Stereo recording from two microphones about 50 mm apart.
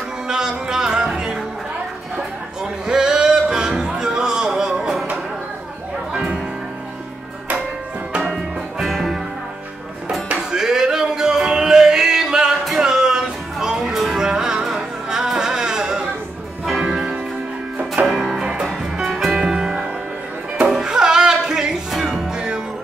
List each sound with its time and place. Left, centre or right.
0.3 s music: centre
2.6 s music: centre
6.1 s music: centre
8.3 s music: centre
10.3 s music: centre